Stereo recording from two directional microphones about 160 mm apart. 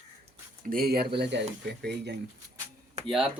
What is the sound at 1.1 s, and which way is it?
Speech, 90° right.